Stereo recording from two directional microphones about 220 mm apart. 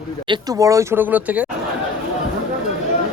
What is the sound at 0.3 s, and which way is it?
A man's voice, 15° right (ahead or behind).